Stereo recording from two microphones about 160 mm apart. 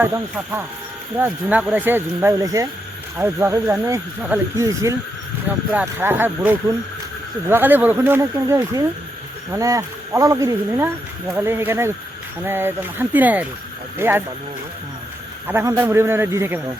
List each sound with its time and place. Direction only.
0.0 s speech: 15° right (ahead or behind)
15.4 s speech: 15° right (ahead or behind)